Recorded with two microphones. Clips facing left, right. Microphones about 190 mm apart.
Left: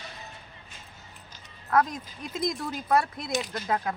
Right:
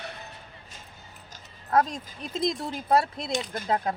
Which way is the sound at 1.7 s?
30° right (ahead or behind).